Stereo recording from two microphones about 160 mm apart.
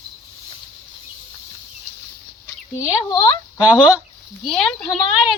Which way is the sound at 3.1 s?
25° left (ahead or behind).